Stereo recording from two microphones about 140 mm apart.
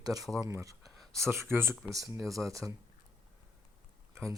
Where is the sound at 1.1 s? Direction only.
20° right (ahead or behind).